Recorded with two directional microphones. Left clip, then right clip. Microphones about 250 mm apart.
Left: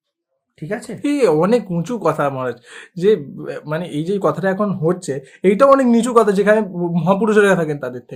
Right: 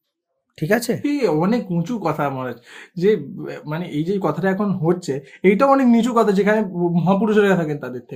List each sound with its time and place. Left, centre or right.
0.6 s speech: right
1.0 s speech: left